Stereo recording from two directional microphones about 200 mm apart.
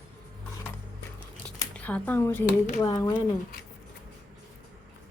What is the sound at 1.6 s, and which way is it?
A woman's voice, 5° left (ahead or behind).